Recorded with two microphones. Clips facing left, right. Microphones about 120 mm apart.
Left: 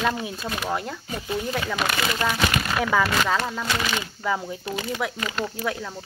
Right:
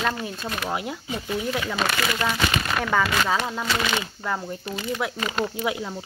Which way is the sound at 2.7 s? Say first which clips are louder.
Left 1 dB; 5° left (ahead or behind).